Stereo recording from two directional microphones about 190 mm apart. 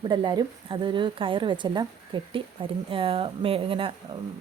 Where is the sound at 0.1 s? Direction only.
20° right (ahead or behind).